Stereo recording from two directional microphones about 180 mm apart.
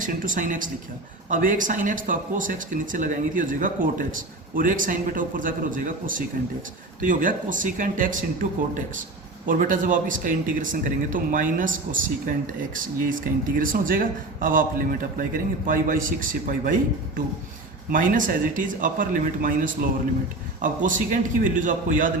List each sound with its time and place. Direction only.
0.0 s speech: 45° right (ahead or behind)
17.9 s speech: 50° right (ahead or behind)